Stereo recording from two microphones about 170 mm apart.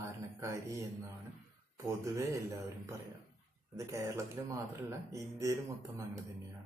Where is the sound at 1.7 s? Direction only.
15° right (ahead or behind).